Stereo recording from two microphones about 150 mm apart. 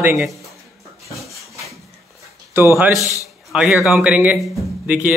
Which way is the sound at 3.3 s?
Centre (ahead or behind).